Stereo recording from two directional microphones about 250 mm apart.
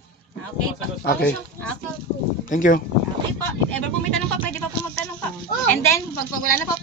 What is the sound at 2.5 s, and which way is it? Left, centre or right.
Speech, left.